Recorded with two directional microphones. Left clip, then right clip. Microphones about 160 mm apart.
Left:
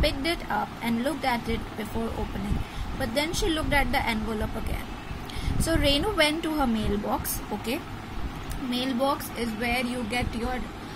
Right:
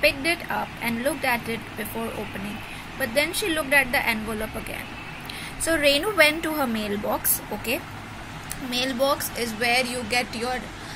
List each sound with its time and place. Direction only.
0.0 s speech: 5° left (ahead or behind)
3.0 s speech: 5° left (ahead or behind)
5.6 s speech: centre (ahead or behind)
8.6 s speech: 5° left (ahead or behind)